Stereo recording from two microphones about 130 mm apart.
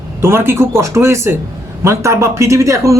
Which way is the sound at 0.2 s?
20° right (ahead or behind).